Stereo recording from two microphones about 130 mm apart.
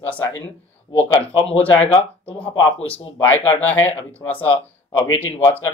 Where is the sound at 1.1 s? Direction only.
50° left (ahead or behind).